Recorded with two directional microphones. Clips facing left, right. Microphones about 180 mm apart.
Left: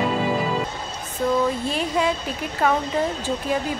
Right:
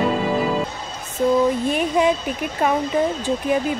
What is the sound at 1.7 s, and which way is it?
Speech, 20° right (ahead or behind).